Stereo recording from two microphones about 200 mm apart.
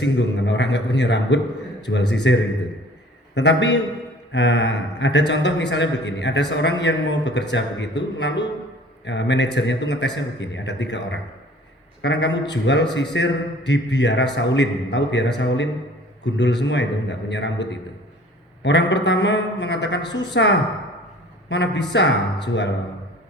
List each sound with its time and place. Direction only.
0.0 s a man's voice: 65° left (ahead or behind)